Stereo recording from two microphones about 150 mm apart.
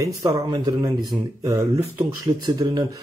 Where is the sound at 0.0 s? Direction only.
25° right (ahead or behind).